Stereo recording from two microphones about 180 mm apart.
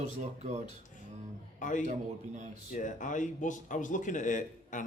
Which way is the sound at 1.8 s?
45° right (ahead or behind).